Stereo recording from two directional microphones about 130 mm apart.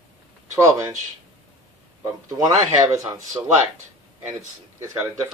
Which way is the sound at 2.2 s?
25° right (ahead or behind).